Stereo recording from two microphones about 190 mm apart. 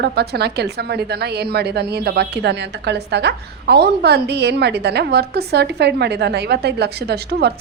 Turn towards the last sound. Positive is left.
turn(degrees=-60)  # may be behind; listen again after turning